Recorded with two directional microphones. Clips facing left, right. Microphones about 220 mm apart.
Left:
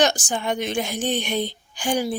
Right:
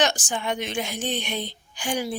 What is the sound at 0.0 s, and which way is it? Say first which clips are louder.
A woman's voice: left 3 dB; 40° left (ahead or behind).